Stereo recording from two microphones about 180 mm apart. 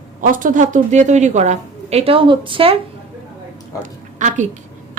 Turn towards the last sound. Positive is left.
turn(degrees=-45)  # may be behind; listen again after turning